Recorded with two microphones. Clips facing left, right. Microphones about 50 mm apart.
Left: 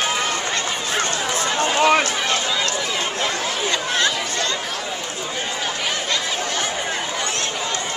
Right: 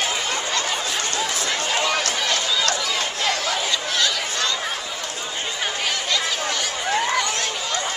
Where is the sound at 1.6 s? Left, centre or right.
Left.